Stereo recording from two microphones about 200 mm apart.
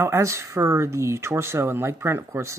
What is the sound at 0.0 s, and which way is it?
Speech, 15° right (ahead or behind).